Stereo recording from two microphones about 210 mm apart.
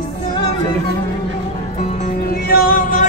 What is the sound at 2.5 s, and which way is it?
Music, 45° left (ahead or behind).